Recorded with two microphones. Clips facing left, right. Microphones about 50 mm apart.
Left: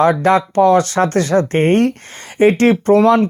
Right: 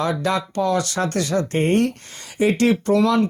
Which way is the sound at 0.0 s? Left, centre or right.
Left.